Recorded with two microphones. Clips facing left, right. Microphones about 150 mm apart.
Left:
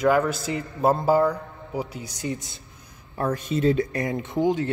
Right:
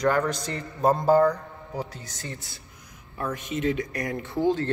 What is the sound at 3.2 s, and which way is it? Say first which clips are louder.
Speech: left 5 dB; 35° left (ahead or behind).